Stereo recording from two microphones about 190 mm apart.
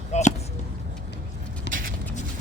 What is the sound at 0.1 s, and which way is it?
Basketball bounce, 40° left (ahead or behind).